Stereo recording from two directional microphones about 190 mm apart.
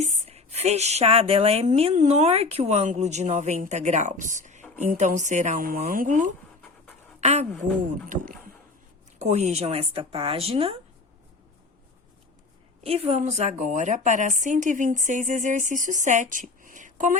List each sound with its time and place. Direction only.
0.0 s a woman's voice: 35° right (ahead or behind)
8.1 s a woman's voice: 45° right (ahead or behind); by 10.8 s 30° right (ahead or behind)
12.8 s a woman's voice: 30° right (ahead or behind)